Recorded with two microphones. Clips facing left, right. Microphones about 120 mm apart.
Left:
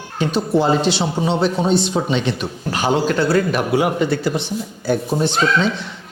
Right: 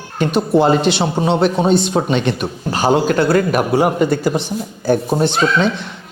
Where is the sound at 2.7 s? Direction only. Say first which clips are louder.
Right 3 dB; 40° right (ahead or behind).